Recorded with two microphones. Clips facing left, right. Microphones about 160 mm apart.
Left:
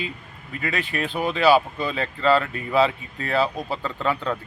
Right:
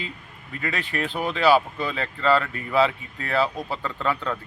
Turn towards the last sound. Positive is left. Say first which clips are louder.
# left 2 dB
turn(degrees=15)  # may be behind; listen again after turning